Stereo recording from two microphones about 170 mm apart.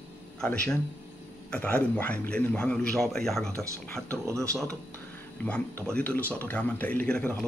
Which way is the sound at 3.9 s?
5° left (ahead or behind).